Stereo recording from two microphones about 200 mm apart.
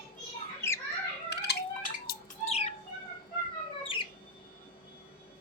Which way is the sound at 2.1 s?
50° left (ahead or behind).